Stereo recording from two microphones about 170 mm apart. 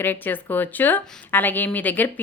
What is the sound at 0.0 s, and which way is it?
A woman's voice, 10° left (ahead or behind).